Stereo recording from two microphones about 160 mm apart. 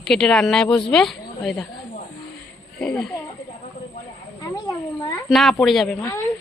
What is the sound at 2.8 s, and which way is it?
Speech, 5° left (ahead or behind).